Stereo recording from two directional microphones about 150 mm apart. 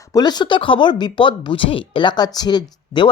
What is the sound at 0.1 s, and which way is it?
Speech, 30° left (ahead or behind).